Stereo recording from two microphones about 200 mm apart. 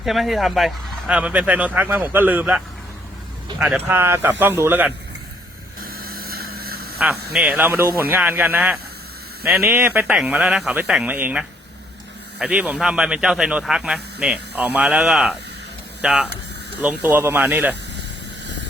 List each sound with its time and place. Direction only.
0.0 s speech: centre (ahead or behind)
3.6 s speech: 5° right (ahead or behind)
5.8 s vehicle: 50° right (ahead or behind)
7.0 s speech: 5° right (ahead or behind)